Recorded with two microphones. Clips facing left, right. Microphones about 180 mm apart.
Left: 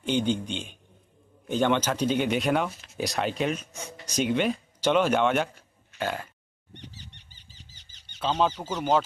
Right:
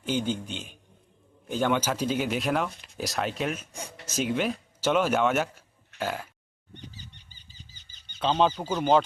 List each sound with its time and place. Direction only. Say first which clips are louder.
0.0 s speech: left 3 dB; 5° right (ahead or behind)
3.7 s speech: even; 35° right (ahead or behind)
4.0 s speech: left 2 dB; 5° right (ahead or behind)
6.0 s a sound: left 1 dB; 5° right (ahead or behind)
6.7 s bird: even; 75° left (ahead or behind)
8.4 s speech: right 2 dB; 5° right (ahead or behind)